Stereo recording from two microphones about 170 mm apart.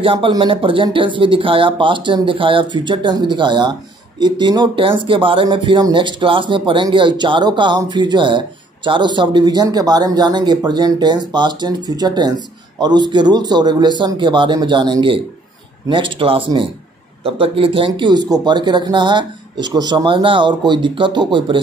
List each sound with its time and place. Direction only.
0.0 s speech: 30° right (ahead or behind)